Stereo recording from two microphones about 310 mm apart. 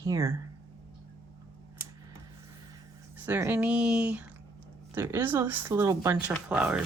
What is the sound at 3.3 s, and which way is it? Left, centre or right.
Speech, centre.